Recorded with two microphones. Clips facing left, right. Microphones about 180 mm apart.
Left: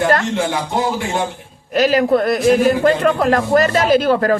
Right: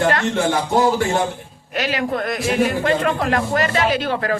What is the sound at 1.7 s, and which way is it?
A man's voice, 40° left (ahead or behind).